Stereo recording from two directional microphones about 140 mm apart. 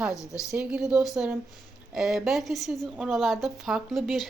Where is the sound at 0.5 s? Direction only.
5° right (ahead or behind).